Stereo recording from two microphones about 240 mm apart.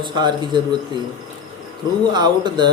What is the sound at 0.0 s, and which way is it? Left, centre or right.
Speech, centre.